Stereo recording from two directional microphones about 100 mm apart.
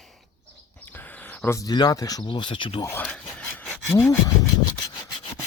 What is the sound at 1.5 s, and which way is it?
Speech, 40° left (ahead or behind).